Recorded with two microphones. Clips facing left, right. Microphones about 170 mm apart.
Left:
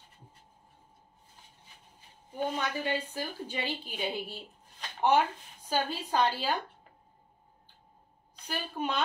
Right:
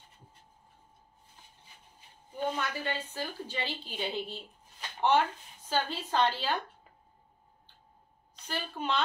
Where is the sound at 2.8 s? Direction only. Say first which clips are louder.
Left 3 dB; 10° left (ahead or behind).